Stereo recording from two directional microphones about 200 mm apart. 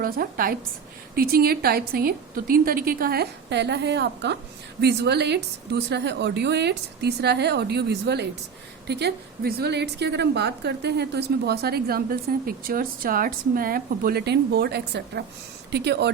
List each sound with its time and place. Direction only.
0.0 s a woman's voice: 45° right (ahead or behind)